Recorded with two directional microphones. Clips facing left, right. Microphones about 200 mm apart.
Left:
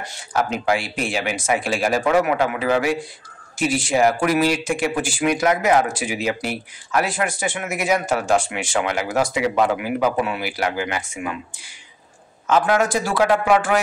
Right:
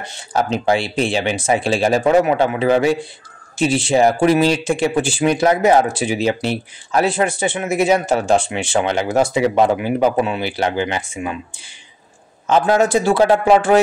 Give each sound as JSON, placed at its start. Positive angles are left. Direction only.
{"t": 0.0, "sound": "speech", "side_deg": -25}
{"t": 12.4, "sound": "speech", "side_deg": -30}